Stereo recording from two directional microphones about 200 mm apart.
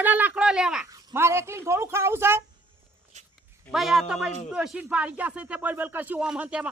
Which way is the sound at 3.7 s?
Centre (ahead or behind).